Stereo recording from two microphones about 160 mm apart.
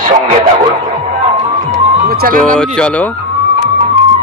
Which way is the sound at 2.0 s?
70° right (ahead or behind).